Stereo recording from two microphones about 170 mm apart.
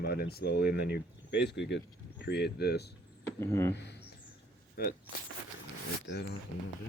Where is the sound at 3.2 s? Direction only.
15° left (ahead or behind).